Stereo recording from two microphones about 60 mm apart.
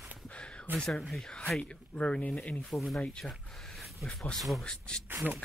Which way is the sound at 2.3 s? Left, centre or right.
Centre.